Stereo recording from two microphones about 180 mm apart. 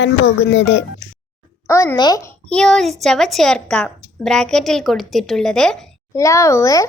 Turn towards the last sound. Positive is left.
turn(degrees=15)  # may be behind; listen again after turning